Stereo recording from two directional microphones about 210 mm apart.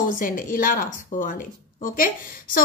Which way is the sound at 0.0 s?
40° left (ahead or behind).